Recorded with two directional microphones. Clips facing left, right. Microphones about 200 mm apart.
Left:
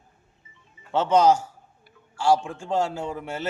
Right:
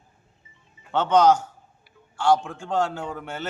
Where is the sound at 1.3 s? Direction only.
30° left (ahead or behind).